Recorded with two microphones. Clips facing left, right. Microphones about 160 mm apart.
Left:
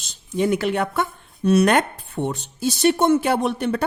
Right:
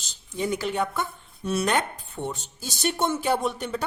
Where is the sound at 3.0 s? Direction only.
65° left (ahead or behind).